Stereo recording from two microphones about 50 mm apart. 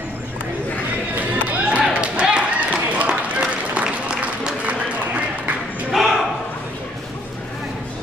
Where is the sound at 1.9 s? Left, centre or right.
Right.